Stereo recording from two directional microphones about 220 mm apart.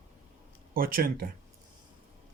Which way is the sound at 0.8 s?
40° right (ahead or behind).